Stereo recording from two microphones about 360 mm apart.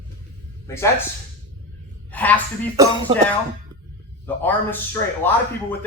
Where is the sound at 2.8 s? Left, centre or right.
Centre.